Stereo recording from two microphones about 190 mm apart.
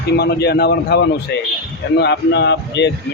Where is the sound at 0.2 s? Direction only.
60° left (ahead or behind).